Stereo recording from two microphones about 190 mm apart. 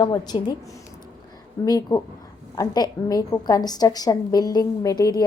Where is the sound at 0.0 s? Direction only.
25° left (ahead or behind).